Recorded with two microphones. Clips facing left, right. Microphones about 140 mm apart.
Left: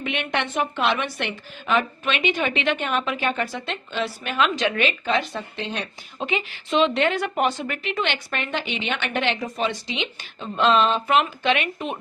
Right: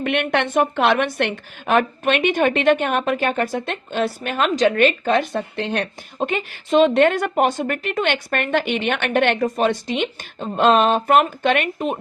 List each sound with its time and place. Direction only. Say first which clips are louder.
0.0 s a woman's voice: right 6 dB; 55° right (ahead or behind)